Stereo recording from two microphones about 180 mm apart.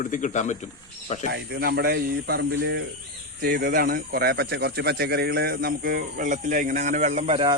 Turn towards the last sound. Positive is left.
turn(degrees=-30)  # may be behind; listen again after turning